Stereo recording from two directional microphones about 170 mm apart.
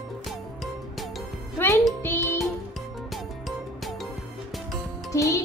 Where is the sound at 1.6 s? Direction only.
15° left (ahead or behind).